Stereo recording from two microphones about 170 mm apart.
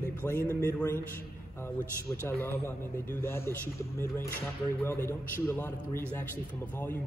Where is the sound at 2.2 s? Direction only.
10° left (ahead or behind).